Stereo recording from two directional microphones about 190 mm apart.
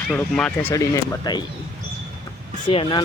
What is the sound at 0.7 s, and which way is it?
Speech, 15° left (ahead or behind).